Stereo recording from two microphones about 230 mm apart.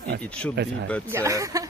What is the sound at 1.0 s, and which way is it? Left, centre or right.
Speech, centre.